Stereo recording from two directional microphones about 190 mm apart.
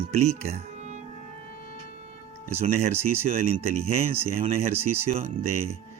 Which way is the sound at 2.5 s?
35° right (ahead or behind).